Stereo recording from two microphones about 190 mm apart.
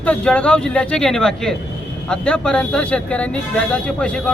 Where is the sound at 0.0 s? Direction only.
5° left (ahead or behind).